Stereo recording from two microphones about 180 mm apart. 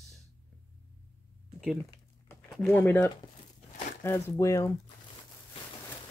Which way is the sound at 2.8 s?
15° left (ahead or behind).